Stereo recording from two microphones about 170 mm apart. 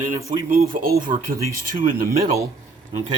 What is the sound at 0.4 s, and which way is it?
Speech, 55° right (ahead or behind).